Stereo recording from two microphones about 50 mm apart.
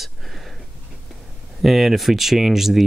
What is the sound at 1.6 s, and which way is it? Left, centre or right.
Speech, centre.